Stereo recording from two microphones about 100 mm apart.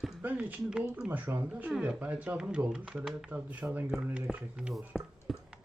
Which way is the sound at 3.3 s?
15° right (ahead or behind).